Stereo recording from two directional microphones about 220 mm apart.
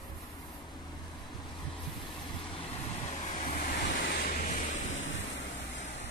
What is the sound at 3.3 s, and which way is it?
Vehicle, 35° left (ahead or behind).